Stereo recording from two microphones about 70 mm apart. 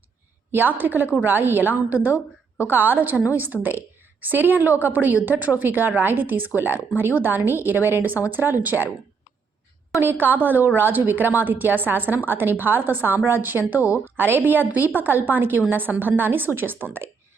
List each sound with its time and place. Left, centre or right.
0.8 s a woman's voice: right
10.0 s a woman's voice: right